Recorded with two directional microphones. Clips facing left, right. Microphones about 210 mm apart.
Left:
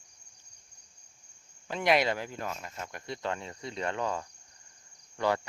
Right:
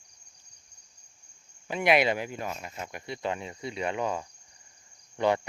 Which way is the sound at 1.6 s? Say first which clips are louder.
Right 3 dB; 10° right (ahead or behind).